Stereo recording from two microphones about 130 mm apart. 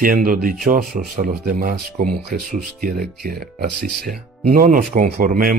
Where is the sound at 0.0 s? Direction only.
90° right.